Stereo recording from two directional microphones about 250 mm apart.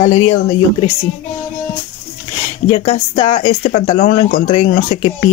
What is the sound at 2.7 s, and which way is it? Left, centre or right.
Speech, left.